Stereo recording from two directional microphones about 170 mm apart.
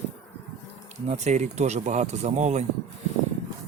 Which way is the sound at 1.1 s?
45° right (ahead or behind).